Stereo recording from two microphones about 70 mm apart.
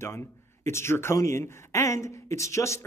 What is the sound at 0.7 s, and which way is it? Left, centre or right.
Speech, left.